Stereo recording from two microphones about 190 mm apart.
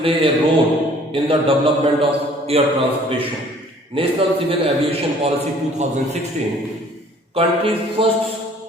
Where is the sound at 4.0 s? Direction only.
30° right (ahead or behind).